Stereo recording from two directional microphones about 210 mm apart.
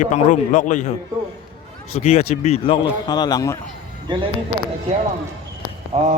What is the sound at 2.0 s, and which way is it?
Speech, 30° left (ahead or behind).